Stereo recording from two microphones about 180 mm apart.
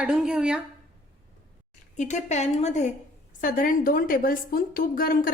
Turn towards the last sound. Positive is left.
turn(degrees=50)  # may be behind; listen again after turning